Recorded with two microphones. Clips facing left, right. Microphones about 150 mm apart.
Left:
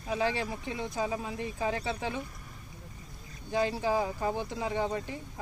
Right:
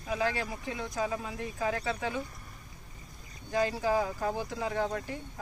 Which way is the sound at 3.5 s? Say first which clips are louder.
Even; 25° left (ahead or behind).